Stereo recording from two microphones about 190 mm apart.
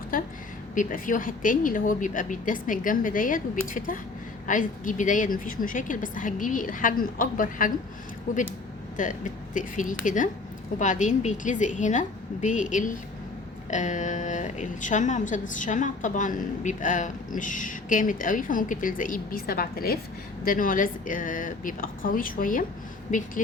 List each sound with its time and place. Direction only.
0.1 s a woman's voice: 45° left (ahead or behind)